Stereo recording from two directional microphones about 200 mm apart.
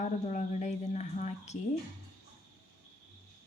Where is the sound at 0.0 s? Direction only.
35° left (ahead or behind).